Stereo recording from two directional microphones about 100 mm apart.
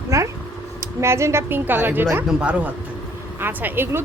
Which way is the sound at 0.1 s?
30° right (ahead or behind).